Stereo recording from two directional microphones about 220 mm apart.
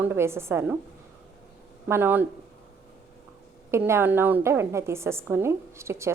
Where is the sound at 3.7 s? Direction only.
10° right (ahead or behind).